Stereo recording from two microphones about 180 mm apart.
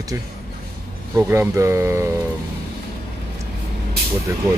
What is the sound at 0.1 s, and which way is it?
Speech, 15° right (ahead or behind).